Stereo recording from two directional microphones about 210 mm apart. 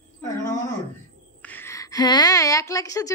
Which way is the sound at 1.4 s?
10° left (ahead or behind).